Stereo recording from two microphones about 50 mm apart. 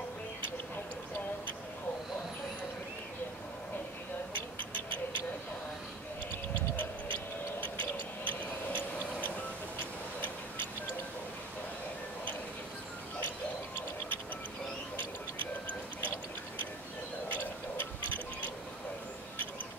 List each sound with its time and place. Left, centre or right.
7.6 s tick-tock: left